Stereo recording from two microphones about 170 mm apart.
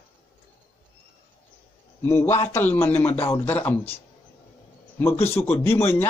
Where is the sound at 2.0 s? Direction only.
15° left (ahead or behind).